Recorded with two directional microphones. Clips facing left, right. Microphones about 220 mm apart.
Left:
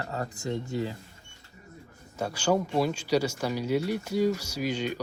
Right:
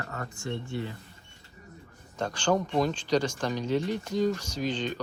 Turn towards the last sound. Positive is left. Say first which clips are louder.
# left 1 dB
turn(degrees=10)  # may be behind; listen again after turning